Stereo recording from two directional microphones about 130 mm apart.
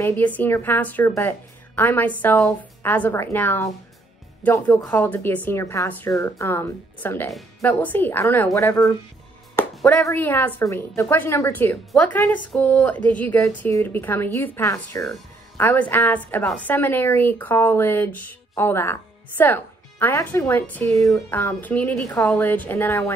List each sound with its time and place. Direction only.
0.0 s a woman's voice: 15° left (ahead or behind)
9.6 s a sound: 20° left (ahead or behind)
10.0 s a woman's voice: 15° left (ahead or behind)